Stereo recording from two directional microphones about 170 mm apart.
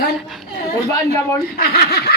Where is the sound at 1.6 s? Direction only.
70° left (ahead or behind).